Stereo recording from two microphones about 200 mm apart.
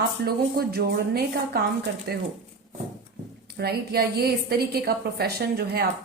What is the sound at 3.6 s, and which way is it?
A woman's voice, 50° right (ahead or behind).